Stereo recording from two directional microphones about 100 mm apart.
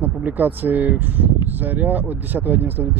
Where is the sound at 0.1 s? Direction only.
15° right (ahead or behind).